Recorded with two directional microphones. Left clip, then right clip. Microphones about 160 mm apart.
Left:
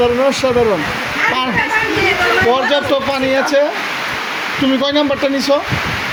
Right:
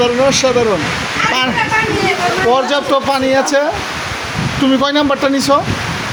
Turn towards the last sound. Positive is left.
turn(degrees=-15)  # may be behind; listen again after turning